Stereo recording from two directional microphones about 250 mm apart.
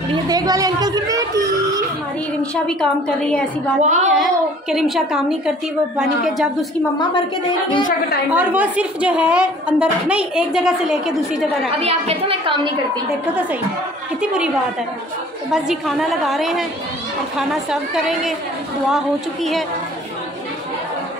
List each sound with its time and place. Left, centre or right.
0.1 s speech: centre
2.5 s a woman's voice: centre
3.8 s a woman's voice: right
4.2 s a woman's voice: centre
8.3 s a woman's voice: centre
11.8 s a woman's voice: right
14.2 s a woman's voice: centre
15.5 s a woman's voice: centre